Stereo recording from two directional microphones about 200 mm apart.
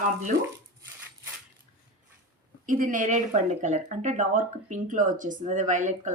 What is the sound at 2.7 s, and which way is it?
Speech, 40° right (ahead or behind).